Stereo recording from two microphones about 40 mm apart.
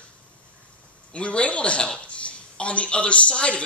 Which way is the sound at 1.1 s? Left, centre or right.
Left.